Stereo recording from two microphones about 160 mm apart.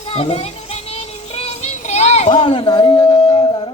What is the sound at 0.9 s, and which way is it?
Child singing, 40° left (ahead or behind).